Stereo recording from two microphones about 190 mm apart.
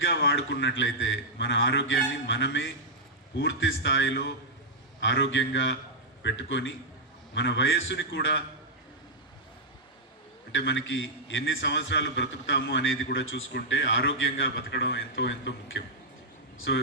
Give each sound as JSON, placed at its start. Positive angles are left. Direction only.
{"t": 0.0, "sound": "a man's voice", "side_deg": 65}
{"t": 10.5, "sound": "a man's voice", "side_deg": 70}